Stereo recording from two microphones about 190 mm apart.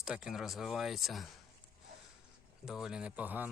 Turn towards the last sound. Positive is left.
turn(degrees=-10)  # may be behind; listen again after turning